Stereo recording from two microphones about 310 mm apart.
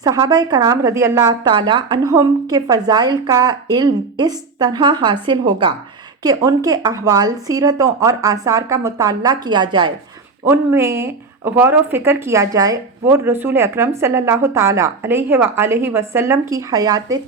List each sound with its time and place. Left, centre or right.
0.0 s speech: centre